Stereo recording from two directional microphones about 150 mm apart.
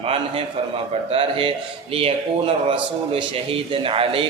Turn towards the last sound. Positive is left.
turn(degrees=-35)  # may be behind; listen again after turning